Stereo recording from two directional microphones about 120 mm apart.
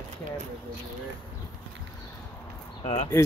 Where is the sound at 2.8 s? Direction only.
50° left (ahead or behind).